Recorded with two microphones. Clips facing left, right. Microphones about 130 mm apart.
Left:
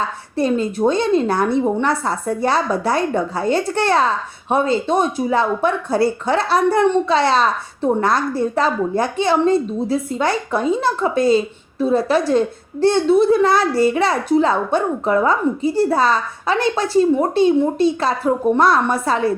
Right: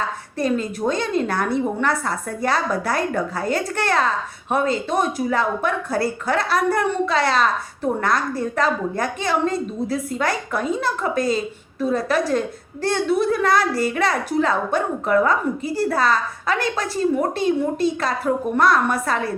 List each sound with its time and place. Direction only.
0.3 s a child's voice: 30° left (ahead or behind)